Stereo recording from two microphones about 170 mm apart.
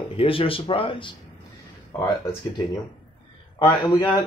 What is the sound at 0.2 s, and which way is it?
Speech, 30° left (ahead or behind).